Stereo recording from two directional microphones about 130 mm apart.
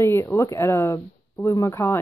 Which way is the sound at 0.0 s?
20° left (ahead or behind).